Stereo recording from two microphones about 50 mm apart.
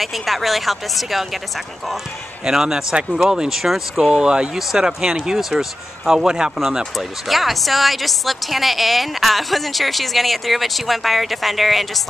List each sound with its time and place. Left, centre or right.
0.0 s a woman's voice: centre
2.4 s a woman's voice: centre